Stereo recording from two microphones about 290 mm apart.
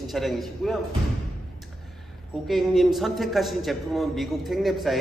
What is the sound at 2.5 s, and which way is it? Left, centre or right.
A man's voice, centre.